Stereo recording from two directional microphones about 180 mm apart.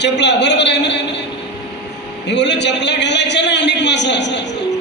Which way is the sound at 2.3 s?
75° left (ahead or behind).